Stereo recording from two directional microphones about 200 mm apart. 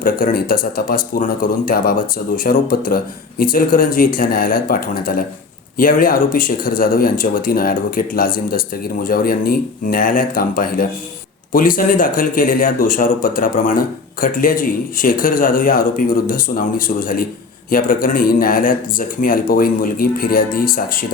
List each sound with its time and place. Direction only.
0.0 s speech: 45° left (ahead or behind)